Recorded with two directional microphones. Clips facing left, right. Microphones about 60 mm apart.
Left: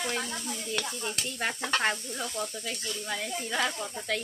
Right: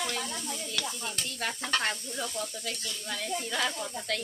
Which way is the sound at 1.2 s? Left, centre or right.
Centre.